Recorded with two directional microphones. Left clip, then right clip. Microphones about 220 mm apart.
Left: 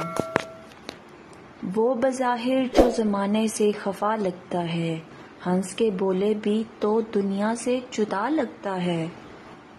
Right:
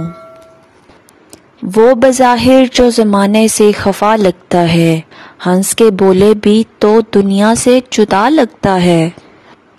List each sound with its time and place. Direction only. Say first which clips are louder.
1.7 s speech: right 16 dB; 45° right (ahead or behind)